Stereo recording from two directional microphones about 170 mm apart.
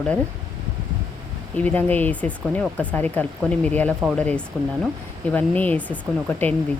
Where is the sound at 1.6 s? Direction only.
10° left (ahead or behind).